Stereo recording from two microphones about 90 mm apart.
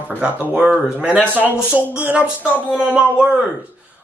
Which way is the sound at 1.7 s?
15° right (ahead or behind).